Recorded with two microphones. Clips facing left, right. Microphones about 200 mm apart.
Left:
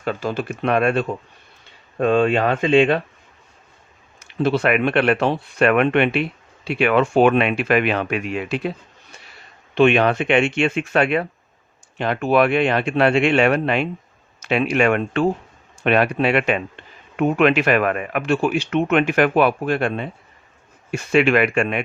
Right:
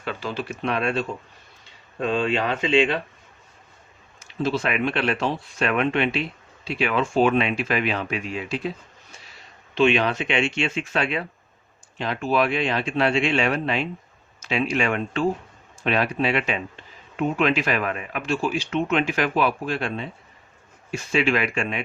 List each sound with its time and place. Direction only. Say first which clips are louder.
0.0 s speech: left 6 dB; 45° left (ahead or behind)
4.2 s a man's voice: left 5 dB; 65° left (ahead or behind)
9.7 s a man's voice: left 5 dB; 60° left (ahead or behind)